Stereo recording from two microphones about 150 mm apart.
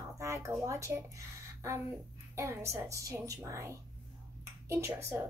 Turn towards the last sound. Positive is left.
turn(degrees=-20)  # may be behind; listen again after turning